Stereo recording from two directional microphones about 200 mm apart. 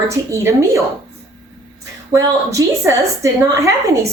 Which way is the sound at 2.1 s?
15° right (ahead or behind).